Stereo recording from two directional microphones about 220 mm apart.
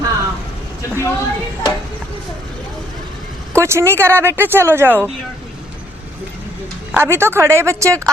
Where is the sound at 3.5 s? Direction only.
10° right (ahead or behind).